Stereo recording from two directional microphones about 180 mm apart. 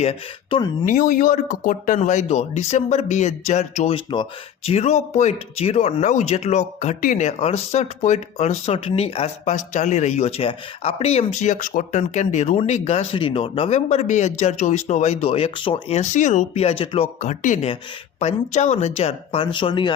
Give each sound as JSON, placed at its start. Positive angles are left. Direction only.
{"t": 0.0, "sound": "speech", "side_deg": 35}
{"t": 0.9, "sound": "speech", "side_deg": 50}